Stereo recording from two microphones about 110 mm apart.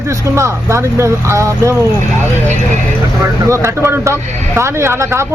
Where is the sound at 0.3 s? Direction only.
25° right (ahead or behind).